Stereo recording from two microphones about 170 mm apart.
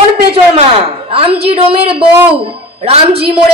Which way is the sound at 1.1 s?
35° right (ahead or behind).